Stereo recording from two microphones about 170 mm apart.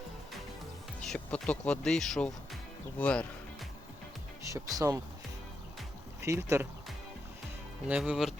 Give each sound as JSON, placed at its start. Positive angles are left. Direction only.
{"t": 1.0, "sound": "speech", "side_deg": 5}
{"t": 3.0, "sound": "music", "side_deg": 5}
{"t": 4.4, "sound": "speech", "side_deg": -20}
{"t": 6.2, "sound": "speech", "side_deg": -15}
{"t": 7.9, "sound": "speech", "side_deg": -5}